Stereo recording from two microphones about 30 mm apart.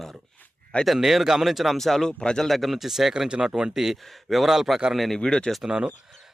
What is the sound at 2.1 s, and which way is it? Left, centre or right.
Speech, left.